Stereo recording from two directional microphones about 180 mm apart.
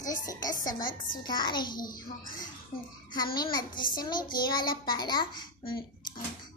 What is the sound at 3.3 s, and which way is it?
Child singing, 25° left (ahead or behind).